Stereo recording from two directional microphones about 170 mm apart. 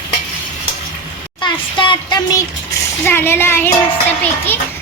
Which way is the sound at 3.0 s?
10° left (ahead or behind).